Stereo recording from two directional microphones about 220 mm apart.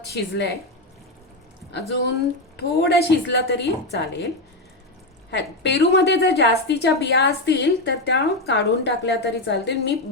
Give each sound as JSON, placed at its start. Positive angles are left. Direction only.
{"t": 0.0, "sound": "a woman's voice", "side_deg": 50}
{"t": 2.6, "sound": "a woman's voice", "side_deg": 45}
{"t": 5.3, "sound": "a woman's voice", "side_deg": 50}